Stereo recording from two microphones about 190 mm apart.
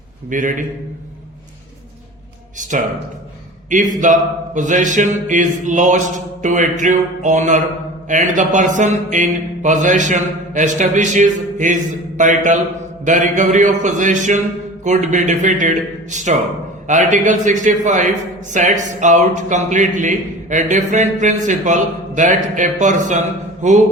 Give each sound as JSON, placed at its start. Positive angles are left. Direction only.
{"t": 0.3, "sound": "a man's voice", "side_deg": -45}
{"t": 2.6, "sound": "mantra", "side_deg": -40}